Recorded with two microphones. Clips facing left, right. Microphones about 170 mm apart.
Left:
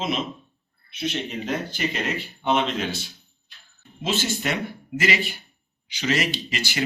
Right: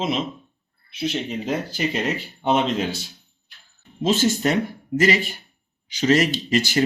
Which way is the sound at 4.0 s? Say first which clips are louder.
Right 7 dB; 40° right (ahead or behind).